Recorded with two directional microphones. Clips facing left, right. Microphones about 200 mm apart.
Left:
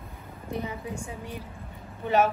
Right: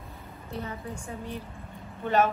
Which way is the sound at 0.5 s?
15° left (ahead or behind).